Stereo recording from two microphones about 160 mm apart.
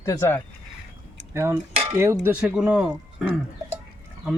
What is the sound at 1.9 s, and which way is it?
Speech, 15° right (ahead or behind).